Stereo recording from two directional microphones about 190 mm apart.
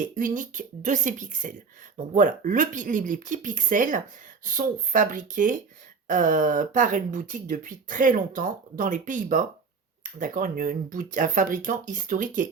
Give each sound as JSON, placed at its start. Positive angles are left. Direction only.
{"t": 0.0, "sound": "speech", "side_deg": -45}